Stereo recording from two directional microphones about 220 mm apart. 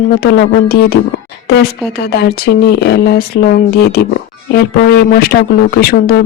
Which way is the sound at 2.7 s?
45° left (ahead or behind).